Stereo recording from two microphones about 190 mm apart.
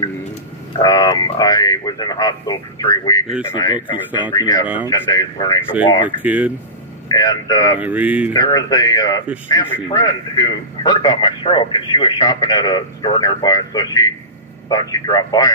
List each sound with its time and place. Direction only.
0.7 s speech: 20° left (ahead or behind)
6.0 s speech: 10° right (ahead or behind)
7.1 s speech: 20° left (ahead or behind)
7.8 s speech: 10° right (ahead or behind)
8.3 s speech: 20° left (ahead or behind)